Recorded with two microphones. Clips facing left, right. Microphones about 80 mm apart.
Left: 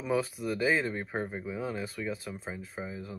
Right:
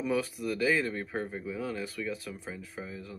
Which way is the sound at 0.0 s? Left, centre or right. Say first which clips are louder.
Even; left.